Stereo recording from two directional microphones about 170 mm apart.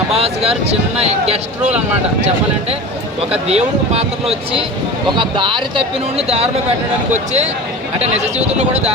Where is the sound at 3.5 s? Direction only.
35° right (ahead or behind).